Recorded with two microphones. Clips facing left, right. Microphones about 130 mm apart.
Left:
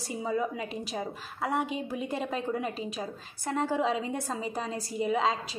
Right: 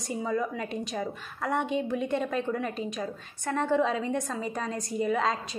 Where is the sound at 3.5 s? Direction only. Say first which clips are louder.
Right 2 dB; 5° left (ahead or behind).